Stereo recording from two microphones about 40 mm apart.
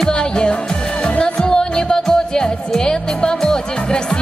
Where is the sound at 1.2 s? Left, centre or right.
Centre.